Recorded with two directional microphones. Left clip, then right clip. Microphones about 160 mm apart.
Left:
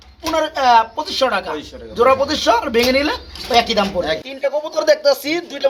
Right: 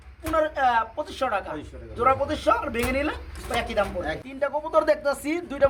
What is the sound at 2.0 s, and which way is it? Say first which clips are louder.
Speech: left 8 dB; 30° left (ahead or behind).